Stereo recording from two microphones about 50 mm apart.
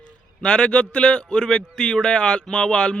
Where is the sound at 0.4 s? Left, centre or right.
Centre.